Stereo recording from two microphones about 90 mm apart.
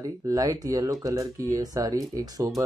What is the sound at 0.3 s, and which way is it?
Speech, 40° right (ahead or behind).